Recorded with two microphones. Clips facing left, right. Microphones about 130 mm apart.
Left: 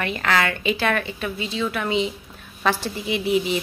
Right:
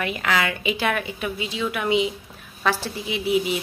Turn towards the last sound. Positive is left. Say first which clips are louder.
# left 1 dB
turn(degrees=-5)  # may be behind; listen again after turning